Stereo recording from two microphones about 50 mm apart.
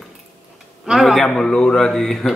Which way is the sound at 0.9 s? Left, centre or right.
Centre.